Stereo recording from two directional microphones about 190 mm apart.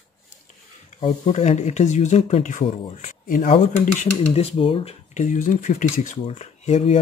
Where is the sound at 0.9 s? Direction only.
35° left (ahead or behind).